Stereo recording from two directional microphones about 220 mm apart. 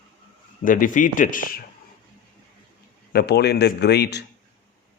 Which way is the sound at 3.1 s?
45° left (ahead or behind).